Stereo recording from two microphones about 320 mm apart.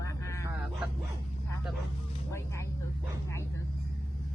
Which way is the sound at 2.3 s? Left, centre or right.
Centre.